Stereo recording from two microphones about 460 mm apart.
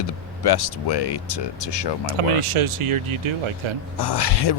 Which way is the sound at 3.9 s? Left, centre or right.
Left.